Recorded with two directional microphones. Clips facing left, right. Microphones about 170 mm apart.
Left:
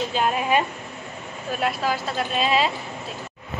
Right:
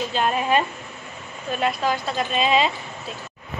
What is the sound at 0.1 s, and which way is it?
A woman's voice, 5° left (ahead or behind).